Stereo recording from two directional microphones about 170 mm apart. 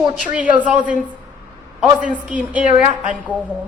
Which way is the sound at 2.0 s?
5° right (ahead or behind).